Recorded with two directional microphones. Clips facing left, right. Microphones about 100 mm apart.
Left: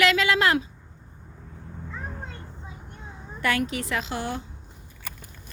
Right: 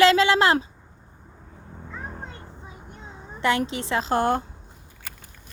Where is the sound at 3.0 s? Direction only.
20° right (ahead or behind).